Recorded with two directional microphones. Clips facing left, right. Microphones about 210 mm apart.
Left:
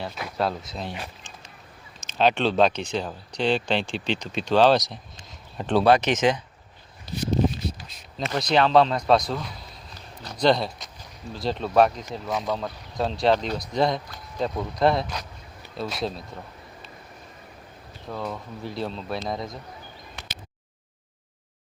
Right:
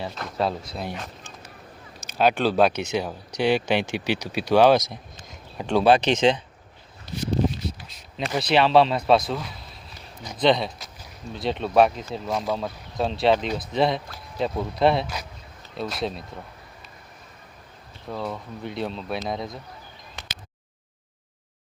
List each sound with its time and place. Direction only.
0.0 s speech: centre (ahead or behind)
2.1 s speech: 5° right (ahead or behind)
5.1 s a sound: centre (ahead or behind)
5.8 s speech: 30° right (ahead or behind)
8.2 s speech: 5° right (ahead or behind)
18.1 s speech: 5° right (ahead or behind)